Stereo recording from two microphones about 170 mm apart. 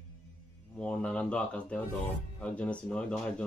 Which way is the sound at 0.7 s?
5° left (ahead or behind).